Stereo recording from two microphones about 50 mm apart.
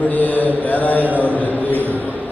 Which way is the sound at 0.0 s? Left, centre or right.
Left.